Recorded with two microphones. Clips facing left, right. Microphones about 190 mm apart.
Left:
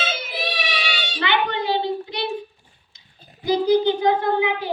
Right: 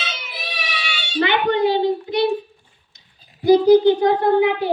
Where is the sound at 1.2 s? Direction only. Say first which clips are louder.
Right 6 dB; 45° right (ahead or behind).